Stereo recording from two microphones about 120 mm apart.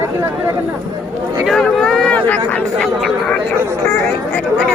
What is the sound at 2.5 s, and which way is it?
Speech, 10° left (ahead or behind).